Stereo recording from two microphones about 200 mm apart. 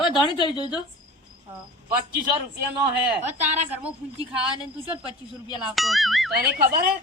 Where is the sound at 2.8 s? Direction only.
10° right (ahead or behind).